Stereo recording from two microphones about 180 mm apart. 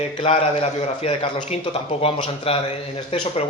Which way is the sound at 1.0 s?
35° left (ahead or behind).